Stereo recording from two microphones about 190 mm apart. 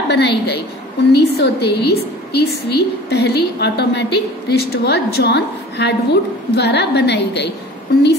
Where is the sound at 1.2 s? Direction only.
60° left (ahead or behind).